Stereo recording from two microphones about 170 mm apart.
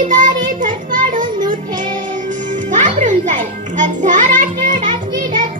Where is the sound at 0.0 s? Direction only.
50° right (ahead or behind).